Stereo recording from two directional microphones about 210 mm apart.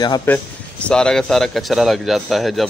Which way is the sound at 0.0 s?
20° left (ahead or behind).